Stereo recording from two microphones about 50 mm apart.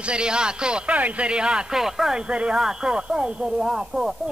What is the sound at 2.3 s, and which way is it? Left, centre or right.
Speech, right.